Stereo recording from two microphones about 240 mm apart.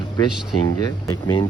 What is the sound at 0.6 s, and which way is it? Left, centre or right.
Speech, centre.